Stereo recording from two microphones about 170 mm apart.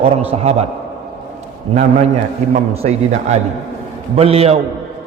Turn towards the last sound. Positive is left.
turn(degrees=-35)  # may be behind; listen again after turning